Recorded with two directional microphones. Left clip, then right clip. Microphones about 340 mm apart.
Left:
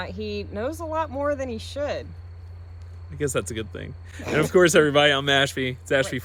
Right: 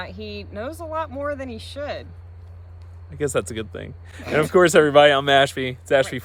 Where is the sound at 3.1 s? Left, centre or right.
Centre.